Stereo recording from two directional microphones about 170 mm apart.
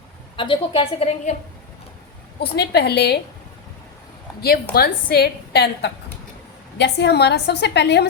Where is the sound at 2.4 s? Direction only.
75° left (ahead or behind).